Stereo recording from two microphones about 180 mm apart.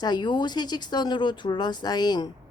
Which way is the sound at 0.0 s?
25° left (ahead or behind).